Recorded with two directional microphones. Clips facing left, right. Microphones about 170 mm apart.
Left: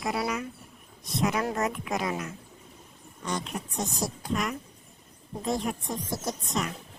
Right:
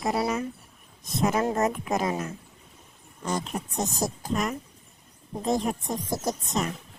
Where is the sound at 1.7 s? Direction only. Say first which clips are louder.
Right 4 dB; 45° right (ahead or behind).